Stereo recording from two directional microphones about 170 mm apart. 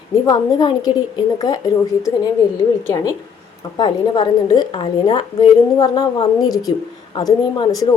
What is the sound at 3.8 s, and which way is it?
A woman's voice, 25° left (ahead or behind).